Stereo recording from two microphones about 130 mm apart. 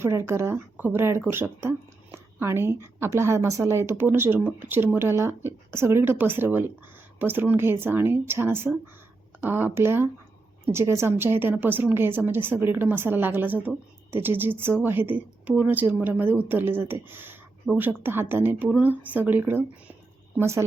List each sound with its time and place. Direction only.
0.0 s a woman's voice: 20° right (ahead or behind)